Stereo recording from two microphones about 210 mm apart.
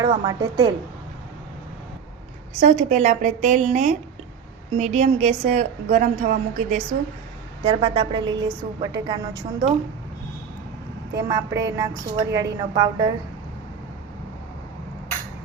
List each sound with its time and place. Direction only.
0.0 s a woman's voice: 20° right (ahead or behind)
2.6 s a woman's voice: 30° right (ahead or behind)
11.3 s a woman's voice: 15° right (ahead or behind)